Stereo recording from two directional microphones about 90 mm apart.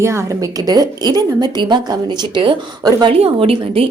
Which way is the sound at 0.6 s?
45° right (ahead or behind).